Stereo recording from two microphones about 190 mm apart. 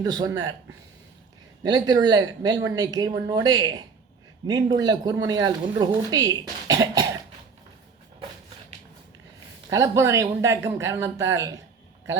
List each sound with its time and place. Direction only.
0.0 s speech: 20° right (ahead or behind)
1.6 s speech: 20° right (ahead or behind)
9.6 s speech: 15° right (ahead or behind)